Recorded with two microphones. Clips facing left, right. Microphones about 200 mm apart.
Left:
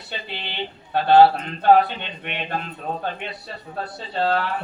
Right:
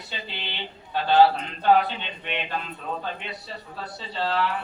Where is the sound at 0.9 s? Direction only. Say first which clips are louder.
Left 5 dB; 65° left (ahead or behind).